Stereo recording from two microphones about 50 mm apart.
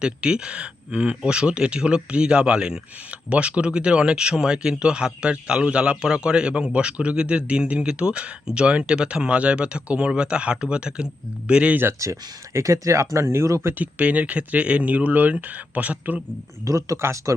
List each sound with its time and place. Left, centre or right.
0.0 s speech: centre
12.0 s speech: right
13.1 s speech: right
14.0 s speech: right
16.6 s speech: right